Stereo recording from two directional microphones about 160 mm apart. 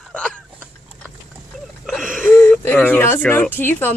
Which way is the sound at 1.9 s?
Centre (ahead or behind).